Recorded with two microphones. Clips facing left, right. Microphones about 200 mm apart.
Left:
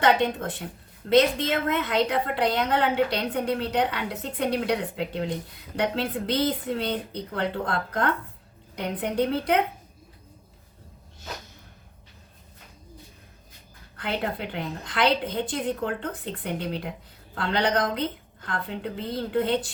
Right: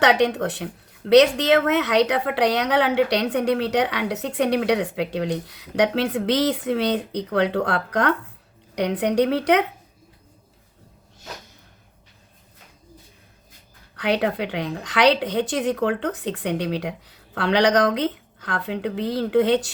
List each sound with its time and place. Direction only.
0.0 s speech: 75° right (ahead or behind)
13.9 s speech: 75° right (ahead or behind)